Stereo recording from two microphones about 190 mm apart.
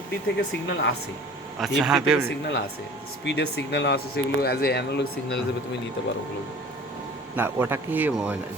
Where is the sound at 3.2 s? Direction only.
65° left (ahead or behind).